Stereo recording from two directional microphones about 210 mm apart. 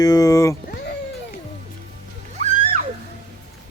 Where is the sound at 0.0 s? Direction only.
15° left (ahead or behind).